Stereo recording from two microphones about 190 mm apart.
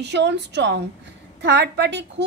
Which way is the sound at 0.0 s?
65° right (ahead or behind).